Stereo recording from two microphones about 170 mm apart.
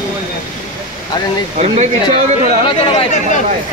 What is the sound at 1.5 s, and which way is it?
Speech, 40° right (ahead or behind).